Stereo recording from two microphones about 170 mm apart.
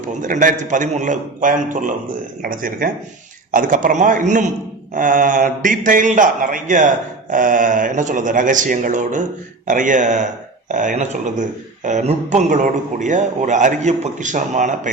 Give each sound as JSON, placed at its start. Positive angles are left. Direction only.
{"t": 0.2, "sound": "a man's voice", "side_deg": -50}